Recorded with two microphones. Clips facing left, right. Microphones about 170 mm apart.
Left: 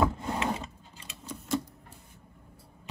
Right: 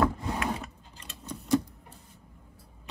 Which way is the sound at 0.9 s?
5° left (ahead or behind).